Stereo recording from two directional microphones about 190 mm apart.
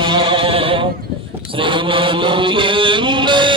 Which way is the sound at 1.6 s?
25° right (ahead or behind).